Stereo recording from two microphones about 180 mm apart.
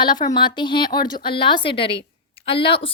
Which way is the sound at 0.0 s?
25° left (ahead or behind).